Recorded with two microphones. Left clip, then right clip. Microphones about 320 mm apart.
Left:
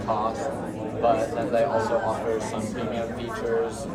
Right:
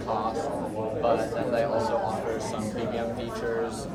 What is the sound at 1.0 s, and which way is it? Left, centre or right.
Speech, centre.